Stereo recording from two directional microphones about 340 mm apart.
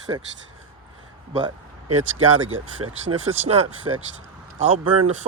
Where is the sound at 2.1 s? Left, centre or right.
Right.